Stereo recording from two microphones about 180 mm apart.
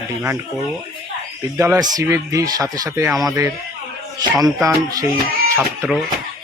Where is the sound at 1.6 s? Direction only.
15° right (ahead or behind).